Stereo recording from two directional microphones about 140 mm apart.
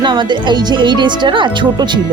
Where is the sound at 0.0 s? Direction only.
35° right (ahead or behind).